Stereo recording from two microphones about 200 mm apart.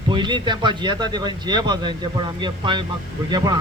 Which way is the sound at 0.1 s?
25° right (ahead or behind).